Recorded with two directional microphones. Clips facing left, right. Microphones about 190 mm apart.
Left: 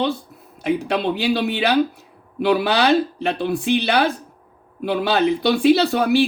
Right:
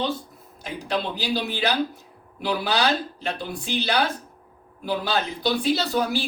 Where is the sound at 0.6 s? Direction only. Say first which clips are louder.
Left 8 dB; 65° left (ahead or behind).